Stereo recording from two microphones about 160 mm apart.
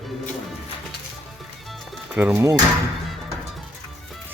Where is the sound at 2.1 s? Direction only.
10° right (ahead or behind).